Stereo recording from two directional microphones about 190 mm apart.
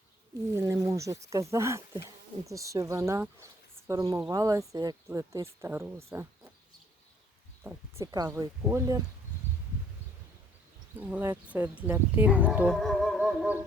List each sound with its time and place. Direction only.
0.5 s speech: 15° right (ahead or behind)
7.6 s speech: 15° right (ahead or behind)
11.0 s speech: 10° right (ahead or behind)
13.2 s music: 10° right (ahead or behind)